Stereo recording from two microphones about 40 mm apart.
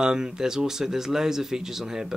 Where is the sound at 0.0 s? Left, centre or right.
Centre.